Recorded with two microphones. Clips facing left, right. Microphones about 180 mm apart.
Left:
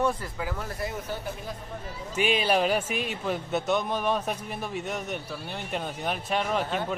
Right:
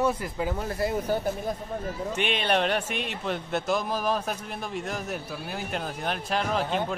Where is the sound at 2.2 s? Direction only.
5° left (ahead or behind).